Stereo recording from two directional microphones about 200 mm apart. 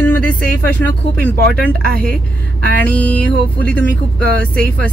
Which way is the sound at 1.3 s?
50° right (ahead or behind).